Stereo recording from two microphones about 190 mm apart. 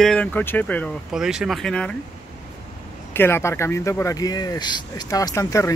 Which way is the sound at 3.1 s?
10° left (ahead or behind).